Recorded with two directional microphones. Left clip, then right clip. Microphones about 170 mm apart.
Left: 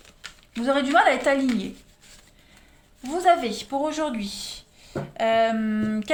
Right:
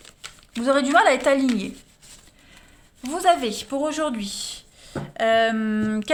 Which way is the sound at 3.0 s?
45° right (ahead or behind).